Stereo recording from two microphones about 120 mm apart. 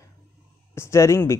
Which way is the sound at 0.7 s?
25° left (ahead or behind).